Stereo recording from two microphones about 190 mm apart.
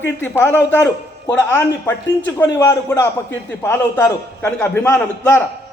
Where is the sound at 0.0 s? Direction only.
10° left (ahead or behind).